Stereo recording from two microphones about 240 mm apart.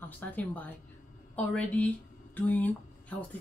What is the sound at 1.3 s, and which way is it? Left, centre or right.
Speech, centre.